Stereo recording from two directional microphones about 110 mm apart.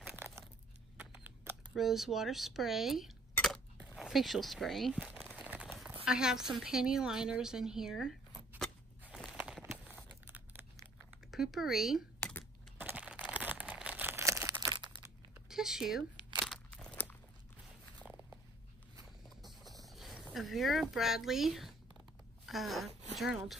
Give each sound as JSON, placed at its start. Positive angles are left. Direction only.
{"t": 0.9, "sound": "shuffling cards", "side_deg": -15}
{"t": 1.8, "sound": "speech", "side_deg": 0}
{"t": 5.2, "sound": "crumpling", "side_deg": -10}
{"t": 6.0, "sound": "a woman's voice", "side_deg": -5}
{"t": 9.1, "sound": "a sound", "side_deg": 0}
{"t": 9.4, "sound": "a sound", "side_deg": -20}
{"t": 11.2, "sound": "speech", "side_deg": 0}
{"t": 12.2, "sound": "a sound", "side_deg": 15}
{"t": 12.7, "sound": "crumpling", "side_deg": -15}
{"t": 15.4, "sound": "a sound", "side_deg": -5}
{"t": 16.4, "sound": "crunch", "side_deg": 5}
{"t": 16.9, "sound": "crunch", "side_deg": 15}
{"t": 19.2, "sound": "boat", "side_deg": 0}
{"t": 20.3, "sound": "speech", "side_deg": 0}